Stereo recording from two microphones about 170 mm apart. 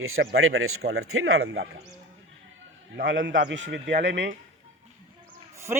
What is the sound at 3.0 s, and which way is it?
A man's voice, 90° right.